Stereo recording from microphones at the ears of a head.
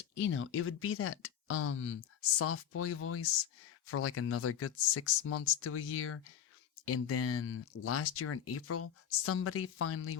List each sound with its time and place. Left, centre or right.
0.0 s speech: left